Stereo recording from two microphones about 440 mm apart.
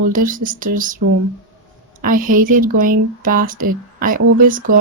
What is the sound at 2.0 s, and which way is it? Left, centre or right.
Speech, centre.